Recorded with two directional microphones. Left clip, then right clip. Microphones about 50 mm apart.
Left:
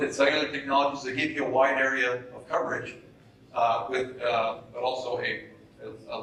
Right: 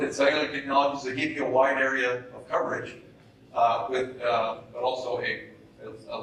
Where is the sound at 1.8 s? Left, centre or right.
Centre.